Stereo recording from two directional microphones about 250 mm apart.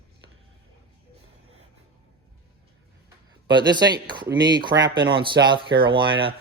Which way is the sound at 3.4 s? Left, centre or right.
Centre.